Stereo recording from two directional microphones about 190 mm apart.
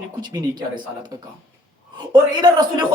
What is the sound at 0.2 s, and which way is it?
A man's voice, 20° right (ahead or behind).